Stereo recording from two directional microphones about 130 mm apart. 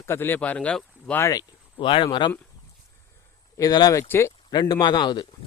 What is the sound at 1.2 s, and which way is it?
Speech, 25° left (ahead or behind).